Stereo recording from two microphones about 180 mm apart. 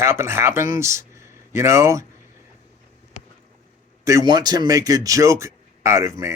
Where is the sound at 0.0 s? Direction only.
15° right (ahead or behind).